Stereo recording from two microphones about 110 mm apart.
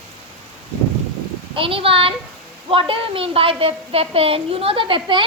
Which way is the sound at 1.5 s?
55° right (ahead or behind).